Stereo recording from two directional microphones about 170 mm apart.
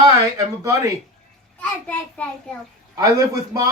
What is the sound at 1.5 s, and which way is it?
A child's voice, 10° left (ahead or behind).